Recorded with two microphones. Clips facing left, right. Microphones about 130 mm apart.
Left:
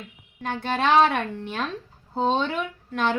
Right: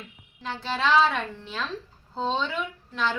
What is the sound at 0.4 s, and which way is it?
A woman's voice, 55° left (ahead or behind).